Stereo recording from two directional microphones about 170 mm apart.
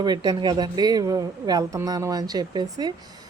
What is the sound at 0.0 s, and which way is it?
Speech, 25° right (ahead or behind).